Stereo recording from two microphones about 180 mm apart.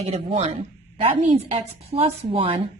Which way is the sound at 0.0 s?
35° right (ahead or behind).